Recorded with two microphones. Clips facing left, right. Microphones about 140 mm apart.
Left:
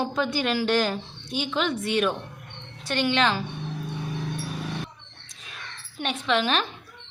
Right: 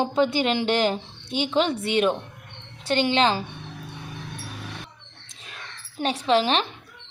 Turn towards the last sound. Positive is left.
turn(degrees=-30)  # may be behind; listen again after turning